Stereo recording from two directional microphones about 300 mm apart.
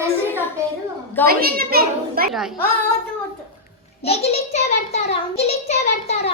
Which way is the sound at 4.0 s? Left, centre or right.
Centre.